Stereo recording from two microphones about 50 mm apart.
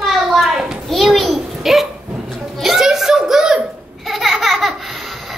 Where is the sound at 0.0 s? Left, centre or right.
Centre.